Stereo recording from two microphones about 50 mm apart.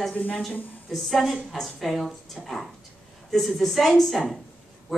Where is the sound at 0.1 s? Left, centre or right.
Left.